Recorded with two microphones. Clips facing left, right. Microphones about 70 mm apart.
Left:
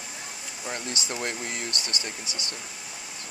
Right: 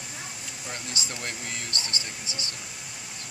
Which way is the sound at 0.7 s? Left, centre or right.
Centre.